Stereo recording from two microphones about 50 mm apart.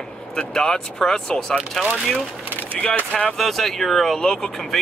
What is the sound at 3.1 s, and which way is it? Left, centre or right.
Speech, centre.